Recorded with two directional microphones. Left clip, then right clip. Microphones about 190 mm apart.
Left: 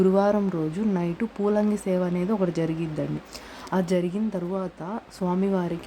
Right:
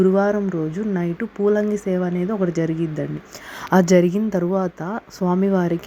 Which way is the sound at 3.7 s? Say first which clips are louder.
Right 10 dB; 35° right (ahead or behind).